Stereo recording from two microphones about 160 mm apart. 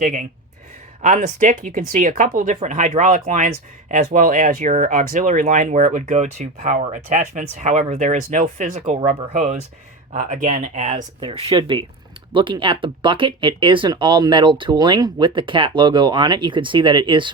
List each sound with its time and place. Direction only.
0.0 s speech: 50° right (ahead or behind)
11.2 s speech: 35° right (ahead or behind)